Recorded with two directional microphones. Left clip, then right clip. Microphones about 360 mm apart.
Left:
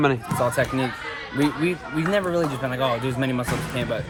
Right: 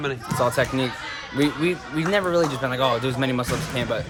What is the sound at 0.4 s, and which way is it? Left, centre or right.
Speech, centre.